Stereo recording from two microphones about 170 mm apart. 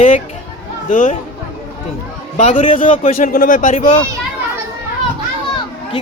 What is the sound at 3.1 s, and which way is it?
Speech, 55° left (ahead or behind).